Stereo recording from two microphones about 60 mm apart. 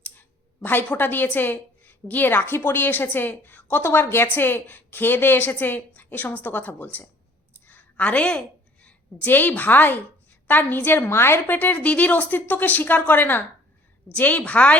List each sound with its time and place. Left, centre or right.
0.0 s a woman's voice: left
3.8 s a woman's voice: left
11.5 s speech: left